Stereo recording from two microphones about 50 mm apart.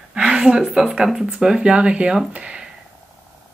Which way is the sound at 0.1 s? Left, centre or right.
Centre.